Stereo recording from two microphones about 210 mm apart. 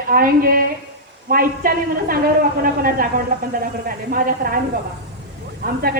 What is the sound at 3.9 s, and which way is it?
Speech, 45° right (ahead or behind).